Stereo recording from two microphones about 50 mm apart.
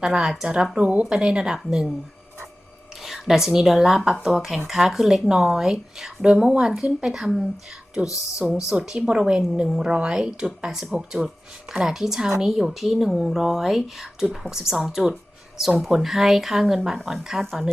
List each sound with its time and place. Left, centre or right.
0.0 s speech: centre
3.0 s a woman's voice: centre